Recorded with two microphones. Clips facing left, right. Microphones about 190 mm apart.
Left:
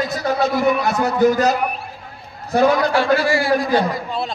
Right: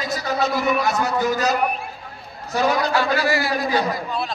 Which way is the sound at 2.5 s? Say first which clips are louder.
Left 5 dB; 55° left (ahead or behind).